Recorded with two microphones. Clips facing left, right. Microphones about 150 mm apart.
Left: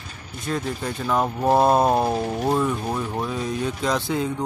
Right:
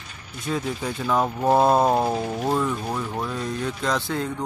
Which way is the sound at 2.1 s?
25° left (ahead or behind).